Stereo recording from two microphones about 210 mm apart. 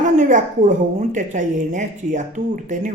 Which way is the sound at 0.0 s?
35° right (ahead or behind).